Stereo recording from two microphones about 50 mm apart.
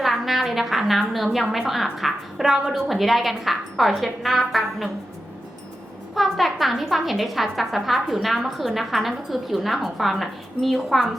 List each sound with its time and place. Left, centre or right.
0.0 s a woman's voice: centre
6.1 s a woman's voice: centre